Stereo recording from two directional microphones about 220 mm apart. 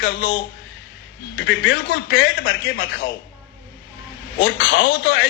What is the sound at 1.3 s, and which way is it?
A man's voice, 60° left (ahead or behind).